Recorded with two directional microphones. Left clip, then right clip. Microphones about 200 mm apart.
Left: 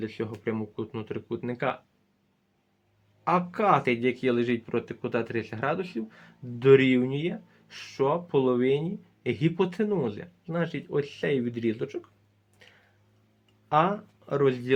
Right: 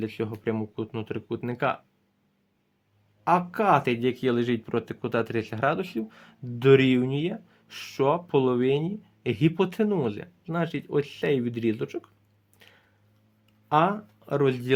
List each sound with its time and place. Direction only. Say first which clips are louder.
0.0 s speech: right 2 dB; 40° right (ahead or behind)
3.2 s speech: right 2 dB; 35° right (ahead or behind)
12.5 s a sound: even; 40° right (ahead or behind)
13.7 s speech: right 1 dB; 40° right (ahead or behind)